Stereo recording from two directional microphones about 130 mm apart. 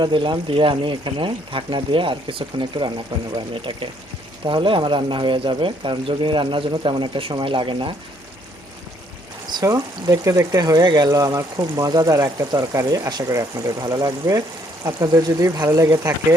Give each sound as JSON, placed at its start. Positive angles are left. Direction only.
{"t": 0.0, "sound": "speech", "side_deg": -40}
{"t": 9.5, "sound": "speech", "side_deg": -30}